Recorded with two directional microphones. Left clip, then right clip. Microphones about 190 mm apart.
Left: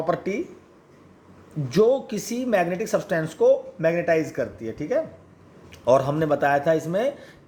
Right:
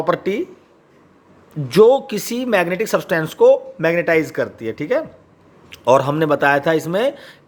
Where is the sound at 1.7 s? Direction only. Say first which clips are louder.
Right 8 dB; 30° right (ahead or behind).